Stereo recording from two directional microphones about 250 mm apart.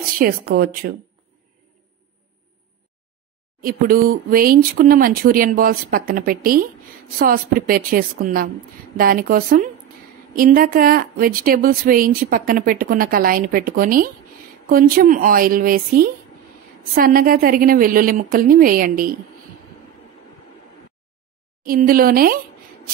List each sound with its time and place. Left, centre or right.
0.2 s a woman's voice: right
3.6 s a woman's voice: right
21.6 s a woman's voice: right